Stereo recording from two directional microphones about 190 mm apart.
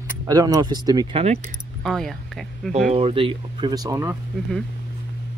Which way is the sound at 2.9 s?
30° right (ahead or behind).